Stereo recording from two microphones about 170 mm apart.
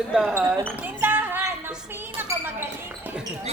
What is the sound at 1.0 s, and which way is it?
Music, 10° right (ahead or behind).